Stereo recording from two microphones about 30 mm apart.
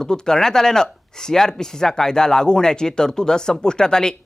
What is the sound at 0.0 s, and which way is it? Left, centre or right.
Speech, left.